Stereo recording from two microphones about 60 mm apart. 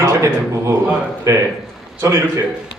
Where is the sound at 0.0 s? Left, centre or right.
Right.